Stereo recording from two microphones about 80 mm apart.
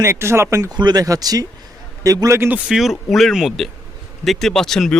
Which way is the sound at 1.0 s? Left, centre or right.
Right.